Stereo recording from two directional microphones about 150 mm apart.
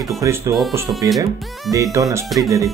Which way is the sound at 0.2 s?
20° right (ahead or behind).